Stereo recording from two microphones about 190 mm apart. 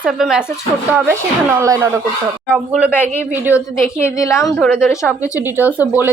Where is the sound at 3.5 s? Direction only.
15° left (ahead or behind).